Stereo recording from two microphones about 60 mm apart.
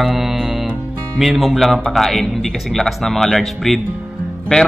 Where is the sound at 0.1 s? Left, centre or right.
Centre.